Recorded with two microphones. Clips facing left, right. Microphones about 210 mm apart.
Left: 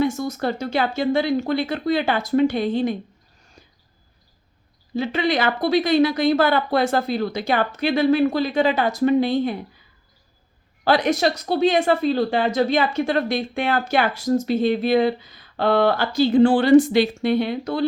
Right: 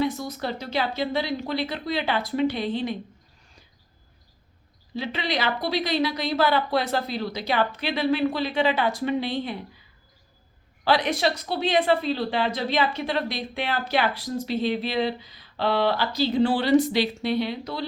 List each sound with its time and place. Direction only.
0.0 s a woman's voice: 45° left (ahead or behind)
4.9 s a woman's voice: 45° left (ahead or behind)
10.8 s a woman's voice: 45° left (ahead or behind)